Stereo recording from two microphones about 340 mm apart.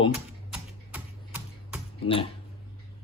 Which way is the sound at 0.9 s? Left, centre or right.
Centre.